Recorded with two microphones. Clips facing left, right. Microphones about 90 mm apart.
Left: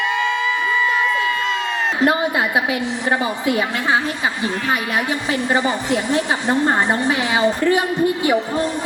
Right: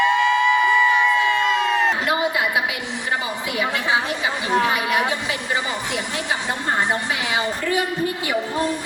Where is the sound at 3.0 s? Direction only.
35° left (ahead or behind).